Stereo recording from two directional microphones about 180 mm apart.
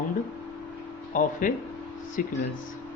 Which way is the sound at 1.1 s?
50° left (ahead or behind).